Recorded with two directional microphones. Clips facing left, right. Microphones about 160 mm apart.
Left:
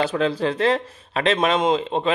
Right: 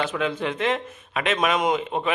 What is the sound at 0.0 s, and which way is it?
Speech, 35° left (ahead or behind).